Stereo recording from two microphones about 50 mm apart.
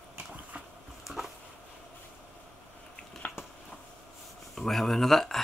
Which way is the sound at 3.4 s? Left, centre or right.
Left.